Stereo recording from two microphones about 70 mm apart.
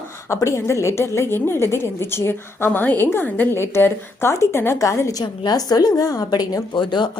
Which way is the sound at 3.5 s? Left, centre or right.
Left.